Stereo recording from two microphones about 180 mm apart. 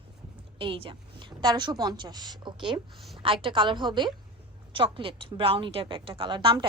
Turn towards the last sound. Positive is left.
turn(degrees=-25)  # may be behind; listen again after turning